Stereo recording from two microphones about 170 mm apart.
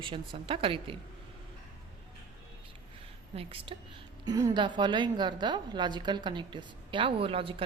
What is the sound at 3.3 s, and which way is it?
Speech, 35° right (ahead or behind).